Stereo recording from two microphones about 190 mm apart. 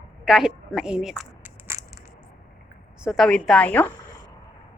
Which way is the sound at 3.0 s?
Centre (ahead or behind).